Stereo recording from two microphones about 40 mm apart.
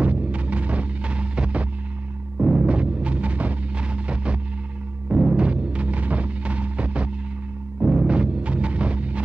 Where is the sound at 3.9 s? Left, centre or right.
Right.